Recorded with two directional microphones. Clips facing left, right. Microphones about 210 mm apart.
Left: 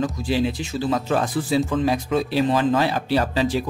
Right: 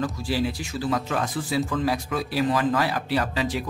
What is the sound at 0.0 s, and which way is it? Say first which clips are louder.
Speech: left 4 dB; 20° left (ahead or behind).